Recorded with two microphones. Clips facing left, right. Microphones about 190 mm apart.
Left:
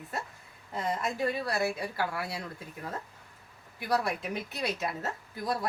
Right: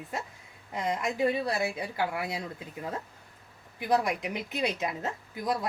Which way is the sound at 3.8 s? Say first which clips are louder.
Right 3 dB; 20° right (ahead or behind).